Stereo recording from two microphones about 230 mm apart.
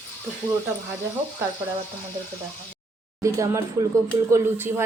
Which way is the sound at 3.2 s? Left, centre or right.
Centre.